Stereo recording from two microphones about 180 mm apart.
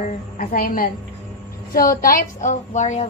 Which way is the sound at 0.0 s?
50° left (ahead or behind).